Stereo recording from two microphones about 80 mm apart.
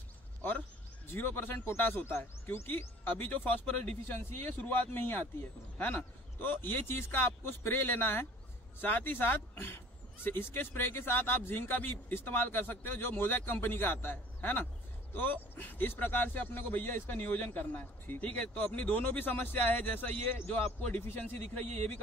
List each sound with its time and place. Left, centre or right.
1.0 s a man's voice: left